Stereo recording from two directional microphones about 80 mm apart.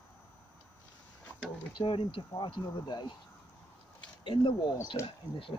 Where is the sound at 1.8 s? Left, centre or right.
Left.